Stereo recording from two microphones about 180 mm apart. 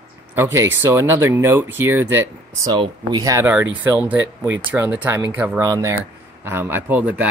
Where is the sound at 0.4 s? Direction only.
15° right (ahead or behind).